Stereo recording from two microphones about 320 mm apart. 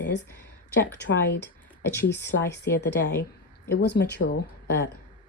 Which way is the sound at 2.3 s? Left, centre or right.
Left.